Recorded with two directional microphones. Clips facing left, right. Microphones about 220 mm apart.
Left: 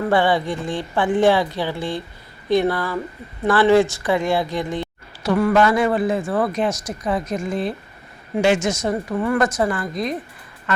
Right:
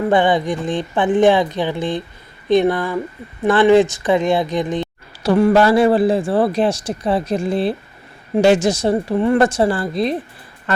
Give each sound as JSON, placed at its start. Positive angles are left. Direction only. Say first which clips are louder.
{"t": 0.1, "sound": "speech", "louder": "right 2 dB", "side_deg": -20}
{"t": 5.2, "sound": "speech", "louder": "right 4 dB", "side_deg": -30}